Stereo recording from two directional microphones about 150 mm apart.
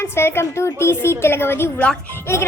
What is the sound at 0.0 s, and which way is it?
Speech, 15° left (ahead or behind).